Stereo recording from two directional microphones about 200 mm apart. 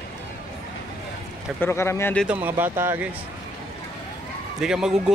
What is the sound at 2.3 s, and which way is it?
Speech, 10° right (ahead or behind).